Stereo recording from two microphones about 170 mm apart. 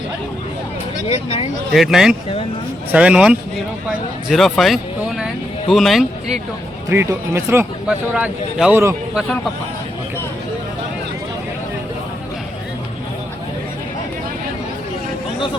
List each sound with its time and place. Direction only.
1.0 s speech: 35° left (ahead or behind)
1.7 s speech: centre (ahead or behind)
6.9 s speech: 15° right (ahead or behind)
7.9 s speech: 5° right (ahead or behind)